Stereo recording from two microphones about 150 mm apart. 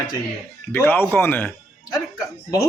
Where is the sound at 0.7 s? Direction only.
10° left (ahead or behind).